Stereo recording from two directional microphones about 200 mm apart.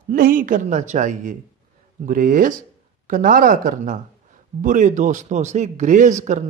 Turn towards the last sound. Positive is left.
turn(degrees=-35)  # may be behind; listen again after turning